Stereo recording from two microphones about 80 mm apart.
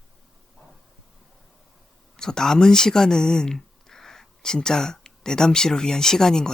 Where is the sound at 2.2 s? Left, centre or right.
Centre.